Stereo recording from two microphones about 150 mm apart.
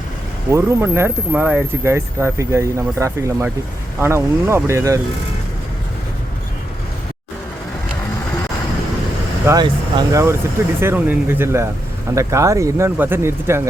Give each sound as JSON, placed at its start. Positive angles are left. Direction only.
{"t": 0.5, "sound": "speech", "side_deg": -15}
{"t": 9.5, "sound": "speech", "side_deg": -25}